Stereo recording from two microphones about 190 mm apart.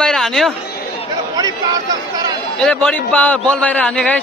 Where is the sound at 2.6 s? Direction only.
5° left (ahead or behind).